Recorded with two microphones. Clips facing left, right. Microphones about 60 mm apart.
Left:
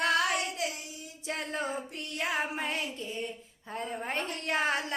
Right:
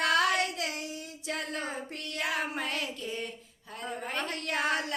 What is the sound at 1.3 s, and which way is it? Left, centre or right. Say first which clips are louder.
Child singing: left 1 dB; left.